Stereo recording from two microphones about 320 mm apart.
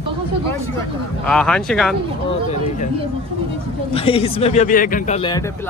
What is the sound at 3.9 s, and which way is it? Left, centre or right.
Speech, centre.